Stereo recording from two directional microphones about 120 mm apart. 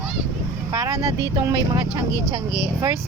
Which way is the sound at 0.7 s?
25° right (ahead or behind).